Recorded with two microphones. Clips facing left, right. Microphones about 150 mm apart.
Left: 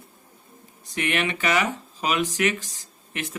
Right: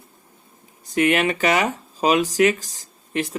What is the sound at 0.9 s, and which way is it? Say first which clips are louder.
Speech: right 7 dB; 40° right (ahead or behind).